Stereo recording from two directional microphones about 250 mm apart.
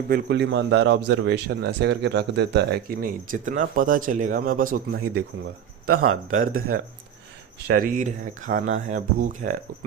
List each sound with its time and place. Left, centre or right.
0.1 s a man's voice: right
6.1 s speech: right
7.7 s a man's voice: right